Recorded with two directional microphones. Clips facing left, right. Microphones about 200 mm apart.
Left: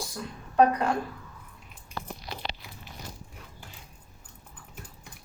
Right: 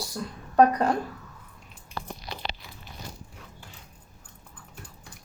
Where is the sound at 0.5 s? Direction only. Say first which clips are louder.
Right 2 dB; 40° right (ahead or behind).